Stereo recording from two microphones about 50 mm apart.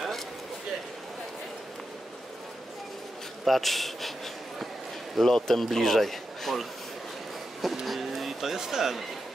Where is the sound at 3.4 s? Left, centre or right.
Centre.